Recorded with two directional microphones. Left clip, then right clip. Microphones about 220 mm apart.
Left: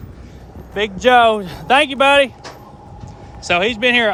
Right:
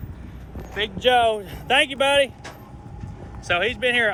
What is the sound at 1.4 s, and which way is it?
Speech, 25° left (ahead or behind).